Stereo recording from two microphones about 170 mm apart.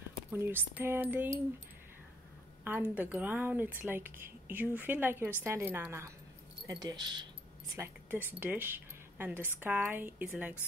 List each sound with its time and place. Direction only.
0.3 s speech: 10° right (ahead or behind)
2.6 s speech: 10° right (ahead or behind)
7.7 s a woman's voice: 15° right (ahead or behind)